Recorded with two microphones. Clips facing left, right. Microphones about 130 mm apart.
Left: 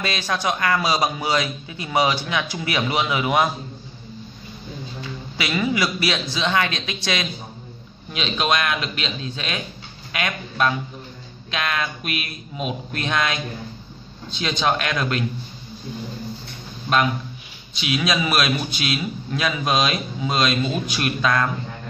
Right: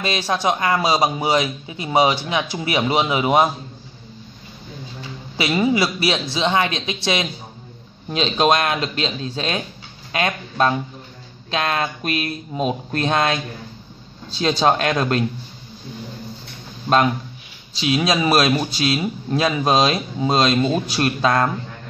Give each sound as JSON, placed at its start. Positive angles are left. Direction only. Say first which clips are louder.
{"t": 0.0, "sound": "a man's voice", "louder": "right 3 dB", "side_deg": -25}
{"t": 5.0, "sound": "a man's voice", "louder": "right 5 dB", "side_deg": -30}
{"t": 8.1, "sound": "a man's voice", "louder": "right 5 dB", "side_deg": -35}
{"t": 17.7, "sound": "a man's voice", "louder": "right 4 dB", "side_deg": -35}